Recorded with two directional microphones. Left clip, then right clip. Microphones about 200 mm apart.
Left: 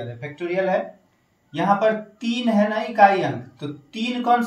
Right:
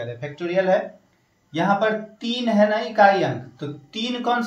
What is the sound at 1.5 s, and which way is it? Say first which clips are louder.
Speech: left 1 dB; 15° right (ahead or behind).